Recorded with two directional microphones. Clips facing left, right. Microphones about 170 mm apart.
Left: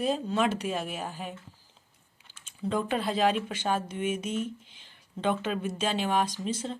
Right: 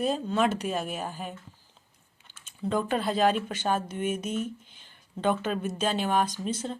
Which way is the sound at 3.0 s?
40° right (ahead or behind).